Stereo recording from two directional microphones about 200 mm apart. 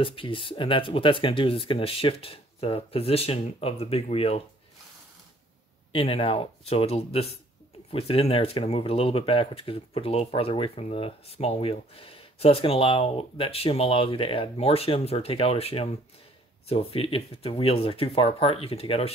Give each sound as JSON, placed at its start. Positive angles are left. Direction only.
{"t": 0.0, "sound": "speech", "side_deg": 25}
{"t": 5.9, "sound": "speech", "side_deg": 30}